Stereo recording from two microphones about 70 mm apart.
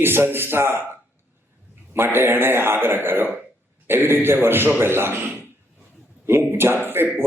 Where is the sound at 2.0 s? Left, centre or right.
Right.